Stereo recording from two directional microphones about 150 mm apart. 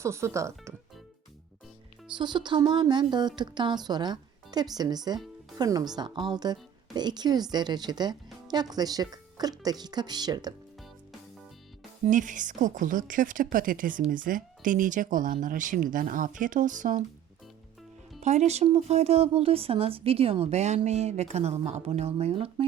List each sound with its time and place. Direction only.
0.0 s speech: 20° right (ahead or behind)
2.1 s speech: 30° right (ahead or behind)
12.0 s speech: 55° right (ahead or behind)
18.2 s speech: 50° right (ahead or behind)